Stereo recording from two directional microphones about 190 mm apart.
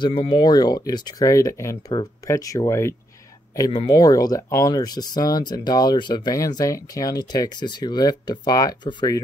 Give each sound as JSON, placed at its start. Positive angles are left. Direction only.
{"t": 0.0, "sound": "speech", "side_deg": 25}